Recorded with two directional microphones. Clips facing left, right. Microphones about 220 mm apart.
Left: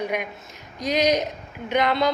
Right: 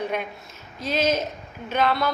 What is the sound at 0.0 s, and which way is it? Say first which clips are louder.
A woman's voice: left 1 dB; 15° left (ahead or behind).